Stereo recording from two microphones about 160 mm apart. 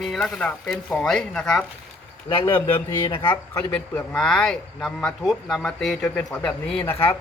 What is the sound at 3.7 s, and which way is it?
Speech, 10° left (ahead or behind).